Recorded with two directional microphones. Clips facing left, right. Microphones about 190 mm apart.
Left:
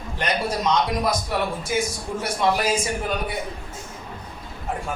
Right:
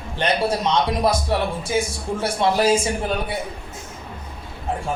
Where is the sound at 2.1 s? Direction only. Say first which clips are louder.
Right 3 dB; 30° right (ahead or behind).